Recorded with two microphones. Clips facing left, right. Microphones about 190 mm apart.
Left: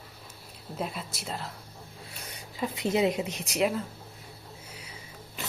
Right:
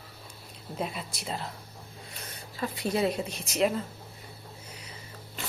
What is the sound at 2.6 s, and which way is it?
Speech, 20° left (ahead or behind).